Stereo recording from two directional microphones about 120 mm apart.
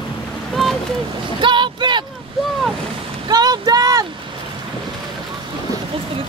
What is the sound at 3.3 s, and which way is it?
Boat, 35° right (ahead or behind).